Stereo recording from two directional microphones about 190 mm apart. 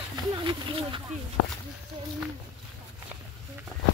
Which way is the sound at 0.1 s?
25° right (ahead or behind).